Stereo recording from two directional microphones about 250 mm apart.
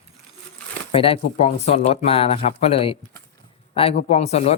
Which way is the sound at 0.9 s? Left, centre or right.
Left.